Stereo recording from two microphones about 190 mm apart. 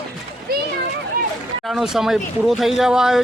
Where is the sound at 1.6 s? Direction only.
Centre (ahead or behind).